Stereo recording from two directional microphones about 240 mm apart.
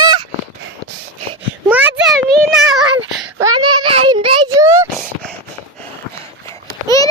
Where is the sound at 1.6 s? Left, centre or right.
Centre.